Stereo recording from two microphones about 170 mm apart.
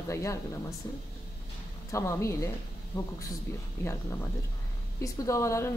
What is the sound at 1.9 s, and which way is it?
Speech, 20° left (ahead or behind).